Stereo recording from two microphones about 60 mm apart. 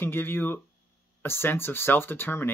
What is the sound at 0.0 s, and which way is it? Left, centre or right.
Speech, left.